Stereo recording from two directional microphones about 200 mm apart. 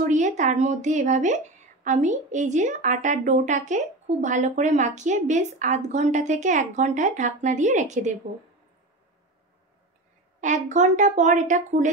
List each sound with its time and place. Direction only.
0.0 s speech: 40° right (ahead or behind)
10.4 s speech: 40° right (ahead or behind)